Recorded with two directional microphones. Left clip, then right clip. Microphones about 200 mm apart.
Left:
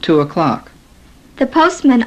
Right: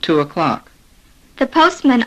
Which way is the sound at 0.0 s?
40° left (ahead or behind).